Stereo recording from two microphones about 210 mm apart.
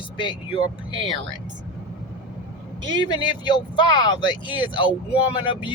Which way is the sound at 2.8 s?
20° right (ahead or behind).